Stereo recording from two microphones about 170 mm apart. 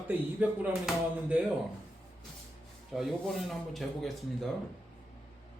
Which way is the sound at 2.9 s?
Centre (ahead or behind).